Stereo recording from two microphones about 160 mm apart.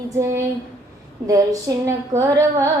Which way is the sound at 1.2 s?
20° right (ahead or behind).